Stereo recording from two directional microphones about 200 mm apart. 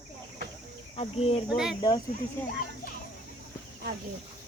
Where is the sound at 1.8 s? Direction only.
20° left (ahead or behind).